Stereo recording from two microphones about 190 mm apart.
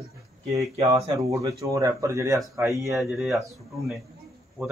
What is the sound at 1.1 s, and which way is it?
Speech, 15° right (ahead or behind).